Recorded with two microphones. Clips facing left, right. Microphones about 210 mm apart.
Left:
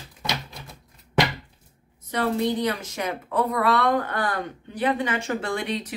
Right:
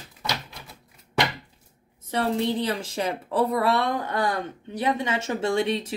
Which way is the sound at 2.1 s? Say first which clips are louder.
Left 1 dB; 30° right (ahead or behind).